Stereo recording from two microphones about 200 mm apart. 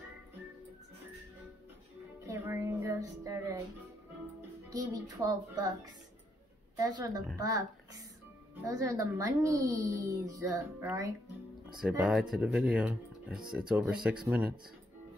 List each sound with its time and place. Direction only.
2.2 s music: 15° right (ahead or behind)
4.6 s music: 20° right (ahead or behind)
6.8 s a woman's voice: 20° right (ahead or behind)